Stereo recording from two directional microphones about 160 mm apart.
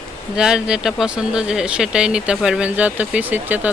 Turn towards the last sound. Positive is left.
turn(degrees=-10)  # may be behind; listen again after turning